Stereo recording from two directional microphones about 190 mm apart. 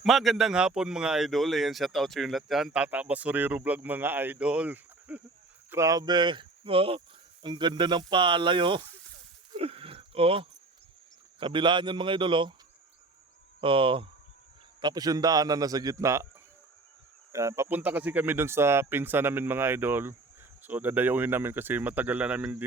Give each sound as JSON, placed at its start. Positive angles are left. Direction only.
{"t": 0.0, "sound": "a man's voice", "side_deg": 0}
{"t": 9.5, "sound": "a sound", "side_deg": -30}
{"t": 11.3, "sound": "speech", "side_deg": -25}
{"t": 13.6, "sound": "speech", "side_deg": -25}
{"t": 17.3, "sound": "speech", "side_deg": -15}